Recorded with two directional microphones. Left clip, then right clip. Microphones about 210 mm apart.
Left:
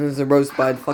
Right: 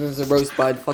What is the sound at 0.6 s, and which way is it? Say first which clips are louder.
Speech: even; 5° left (ahead or behind).